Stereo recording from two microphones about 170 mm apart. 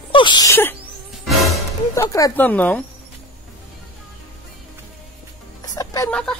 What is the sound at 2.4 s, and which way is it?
Speech, 10° left (ahead or behind).